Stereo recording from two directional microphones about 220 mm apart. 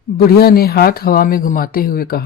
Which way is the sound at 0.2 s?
45° left (ahead or behind).